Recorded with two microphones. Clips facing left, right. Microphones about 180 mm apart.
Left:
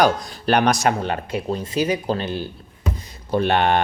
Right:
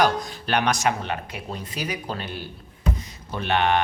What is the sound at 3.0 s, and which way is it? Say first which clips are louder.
Music: left 11 dB; 35° left (ahead or behind).